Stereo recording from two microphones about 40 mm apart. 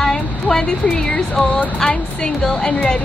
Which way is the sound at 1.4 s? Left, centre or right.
Left.